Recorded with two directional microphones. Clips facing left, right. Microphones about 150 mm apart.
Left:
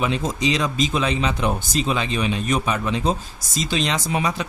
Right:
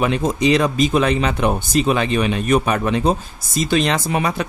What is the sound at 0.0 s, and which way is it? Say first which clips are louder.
Speech: right 5 dB; 55° right (ahead or behind).